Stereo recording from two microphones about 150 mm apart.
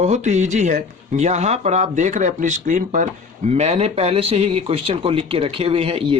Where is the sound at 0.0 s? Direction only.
50° right (ahead or behind).